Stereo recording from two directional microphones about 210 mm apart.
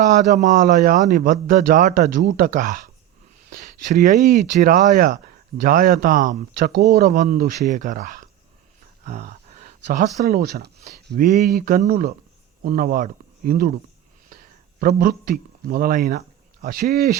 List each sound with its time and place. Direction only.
0.0 s speech: 35° right (ahead or behind)
14.8 s speech: 45° right (ahead or behind)